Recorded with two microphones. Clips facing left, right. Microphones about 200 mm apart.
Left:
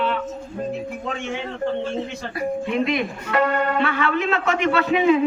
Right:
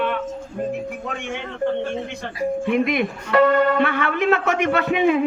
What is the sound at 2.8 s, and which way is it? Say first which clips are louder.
A man's voice: right 1 dB; 55° right (ahead or behind).